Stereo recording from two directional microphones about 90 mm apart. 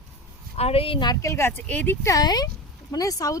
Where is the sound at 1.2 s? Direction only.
30° left (ahead or behind).